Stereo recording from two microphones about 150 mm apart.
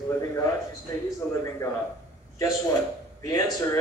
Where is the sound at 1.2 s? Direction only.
10° left (ahead or behind).